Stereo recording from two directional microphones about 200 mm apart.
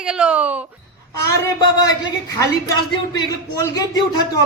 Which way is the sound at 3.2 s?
15° left (ahead or behind).